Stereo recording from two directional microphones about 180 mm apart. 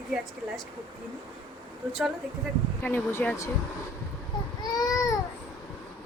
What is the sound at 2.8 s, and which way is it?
Speech, 10° left (ahead or behind).